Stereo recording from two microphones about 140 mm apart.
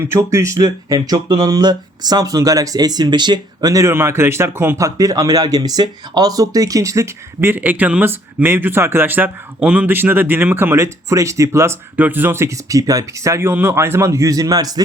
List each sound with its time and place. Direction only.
0.0 s speech: 20° right (ahead or behind)